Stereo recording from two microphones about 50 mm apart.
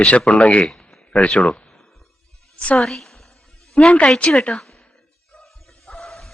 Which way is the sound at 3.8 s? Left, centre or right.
Left.